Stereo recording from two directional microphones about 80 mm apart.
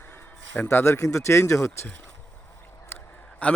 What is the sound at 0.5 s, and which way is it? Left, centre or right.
Speech, left.